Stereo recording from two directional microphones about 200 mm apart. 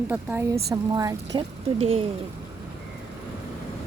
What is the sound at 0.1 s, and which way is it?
A woman's voice, 10° right (ahead or behind).